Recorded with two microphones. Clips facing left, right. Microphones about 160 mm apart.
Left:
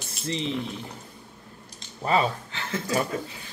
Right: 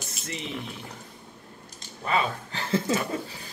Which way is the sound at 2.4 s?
35° right (ahead or behind).